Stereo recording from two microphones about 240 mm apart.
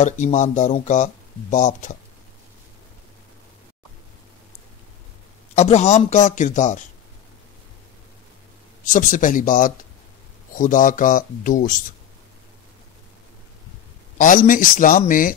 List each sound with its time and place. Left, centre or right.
0.0 s speech: left
5.5 s speech: left
8.9 s speech: left
14.1 s speech: left